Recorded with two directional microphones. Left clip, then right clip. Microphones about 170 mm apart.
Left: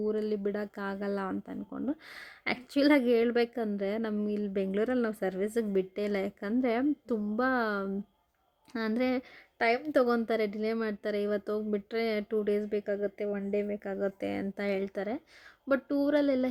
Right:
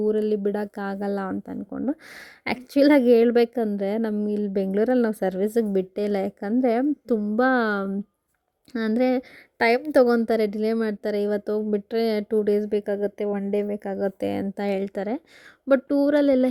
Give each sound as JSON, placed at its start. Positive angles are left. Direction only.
{"t": 0.0, "sound": "a woman's voice", "side_deg": -40}